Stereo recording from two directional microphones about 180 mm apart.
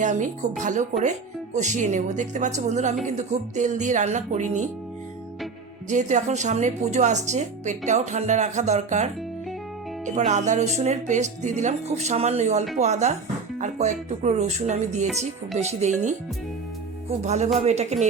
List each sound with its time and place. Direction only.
0.0 s a woman's voice: 45° right (ahead or behind)
5.9 s a woman's voice: 40° right (ahead or behind)
10.2 s a woman's voice: 40° right (ahead or behind)